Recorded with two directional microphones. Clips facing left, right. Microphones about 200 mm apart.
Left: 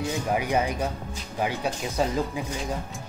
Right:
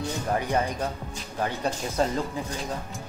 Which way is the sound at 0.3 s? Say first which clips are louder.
Left 1 dB; 10° left (ahead or behind).